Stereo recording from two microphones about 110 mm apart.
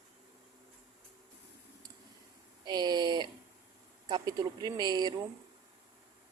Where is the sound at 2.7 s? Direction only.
40° right (ahead or behind).